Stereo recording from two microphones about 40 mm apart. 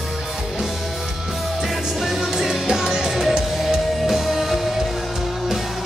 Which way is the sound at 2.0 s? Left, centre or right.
Centre.